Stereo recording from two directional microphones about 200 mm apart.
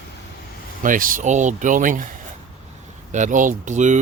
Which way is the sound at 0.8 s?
40° right (ahead or behind).